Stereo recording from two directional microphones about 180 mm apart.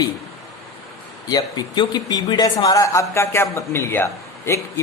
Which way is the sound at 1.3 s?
20° left (ahead or behind).